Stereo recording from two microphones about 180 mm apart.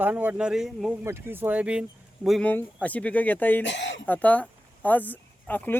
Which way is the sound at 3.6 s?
85° left.